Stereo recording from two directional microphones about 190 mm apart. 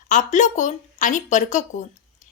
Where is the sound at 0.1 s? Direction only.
40° left (ahead or behind).